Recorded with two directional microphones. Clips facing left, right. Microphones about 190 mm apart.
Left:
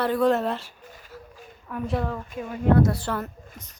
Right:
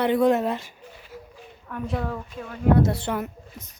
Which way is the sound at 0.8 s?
45° left (ahead or behind).